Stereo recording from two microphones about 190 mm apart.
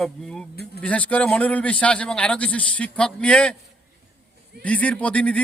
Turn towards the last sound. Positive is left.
turn(degrees=5)  # may be behind; listen again after turning